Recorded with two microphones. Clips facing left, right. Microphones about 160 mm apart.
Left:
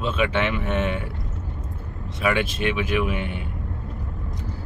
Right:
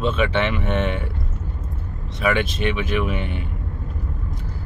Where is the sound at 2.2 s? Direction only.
5° left (ahead or behind).